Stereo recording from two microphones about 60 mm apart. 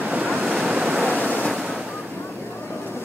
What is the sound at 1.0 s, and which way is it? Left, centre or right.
Waves, right.